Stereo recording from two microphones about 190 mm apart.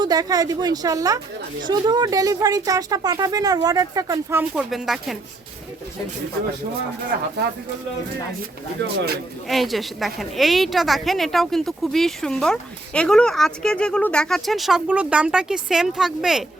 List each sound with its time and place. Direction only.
0.0 s speech: 20° right (ahead or behind)
4.7 s a woman's voice: centre (ahead or behind)
9.5 s a woman's voice: centre (ahead or behind)